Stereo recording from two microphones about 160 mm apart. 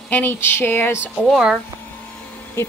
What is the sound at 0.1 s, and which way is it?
Speech, 15° left (ahead or behind).